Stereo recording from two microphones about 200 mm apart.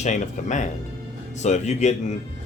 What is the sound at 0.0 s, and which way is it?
Speech, 35° left (ahead or behind).